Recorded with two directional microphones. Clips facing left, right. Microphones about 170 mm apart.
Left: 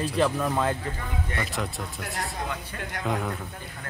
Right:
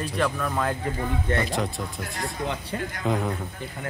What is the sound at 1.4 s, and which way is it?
Speech, 35° right (ahead or behind).